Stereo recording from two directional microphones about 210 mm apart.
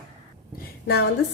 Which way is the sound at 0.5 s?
50° left (ahead or behind).